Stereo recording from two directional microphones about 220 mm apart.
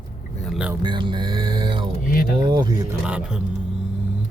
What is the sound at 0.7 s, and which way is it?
Music, 20° right (ahead or behind).